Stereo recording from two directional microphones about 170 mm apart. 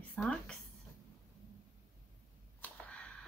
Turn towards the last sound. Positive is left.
turn(degrees=5)  # may be behind; listen again after turning